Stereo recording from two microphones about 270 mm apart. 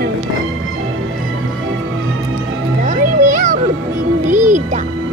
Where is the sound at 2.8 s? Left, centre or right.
Right.